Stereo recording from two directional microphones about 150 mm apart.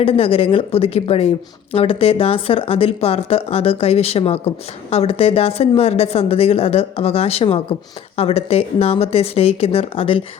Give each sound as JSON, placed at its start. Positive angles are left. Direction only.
{"t": 0.0, "sound": "speech", "side_deg": 40}